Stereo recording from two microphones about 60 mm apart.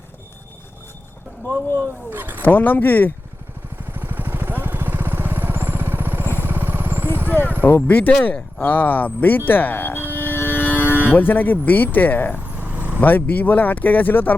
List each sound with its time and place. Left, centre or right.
2.0 s speech: right
2.4 s speech: left
3.9 s vehicle: right
7.3 s vehicle: left
7.9 s speech: left
12.5 s vehicle: right
13.0 s speech: left